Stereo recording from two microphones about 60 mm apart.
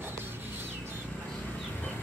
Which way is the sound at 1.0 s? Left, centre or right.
Left.